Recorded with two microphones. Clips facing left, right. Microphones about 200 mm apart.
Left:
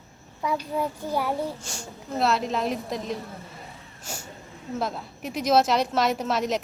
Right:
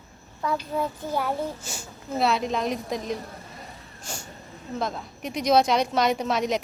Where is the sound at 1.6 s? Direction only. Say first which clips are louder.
Even; 5° right (ahead or behind).